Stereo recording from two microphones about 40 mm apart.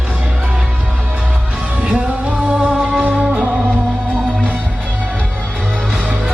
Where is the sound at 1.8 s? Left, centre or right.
Right.